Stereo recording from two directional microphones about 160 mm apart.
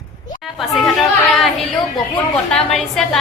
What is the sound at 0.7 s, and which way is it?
Chatter, centre (ahead or behind).